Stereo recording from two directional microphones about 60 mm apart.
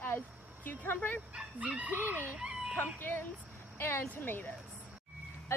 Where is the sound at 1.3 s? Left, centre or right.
Centre; by 2.3 s right.